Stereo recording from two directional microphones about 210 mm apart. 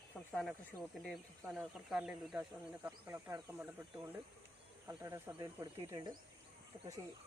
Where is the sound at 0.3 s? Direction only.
Centre (ahead or behind).